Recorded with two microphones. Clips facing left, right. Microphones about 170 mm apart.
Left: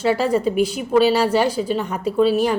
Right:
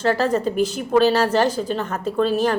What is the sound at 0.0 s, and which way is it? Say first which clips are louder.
A woman's voice: left 1 dB; 10° left (ahead or behind).